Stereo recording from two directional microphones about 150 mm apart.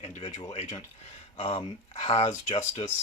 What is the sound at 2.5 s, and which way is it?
Speech, 45° left (ahead or behind).